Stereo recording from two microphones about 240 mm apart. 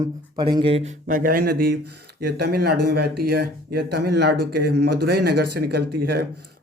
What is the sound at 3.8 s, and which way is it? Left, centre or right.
Speech, right.